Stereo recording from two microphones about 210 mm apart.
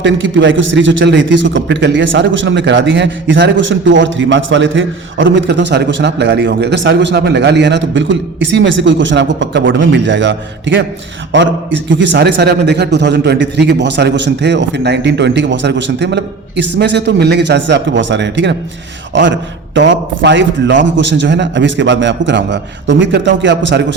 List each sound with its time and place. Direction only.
0.0 s a man's voice: 60° right (ahead or behind)
19.7 s a man's voice: 60° right (ahead or behind)